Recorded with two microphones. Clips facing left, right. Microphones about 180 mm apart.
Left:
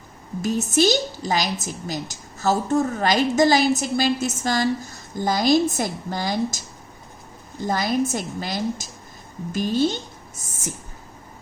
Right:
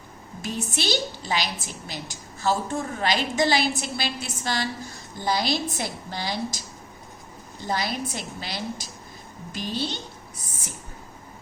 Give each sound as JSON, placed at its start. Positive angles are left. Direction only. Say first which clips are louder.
{"t": 0.4, "sound": "a woman's voice", "louder": "left 9 dB", "side_deg": 45}
{"t": 7.7, "sound": "a woman's voice", "louder": "left 6 dB", "side_deg": 45}